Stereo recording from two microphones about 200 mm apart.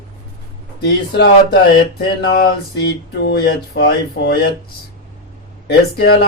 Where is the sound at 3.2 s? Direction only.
55° left (ahead or behind).